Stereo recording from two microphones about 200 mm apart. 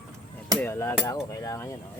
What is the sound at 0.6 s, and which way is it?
Hammer, 10° left (ahead or behind).